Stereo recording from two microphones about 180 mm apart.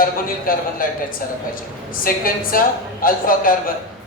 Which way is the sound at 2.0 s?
50° left (ahead or behind).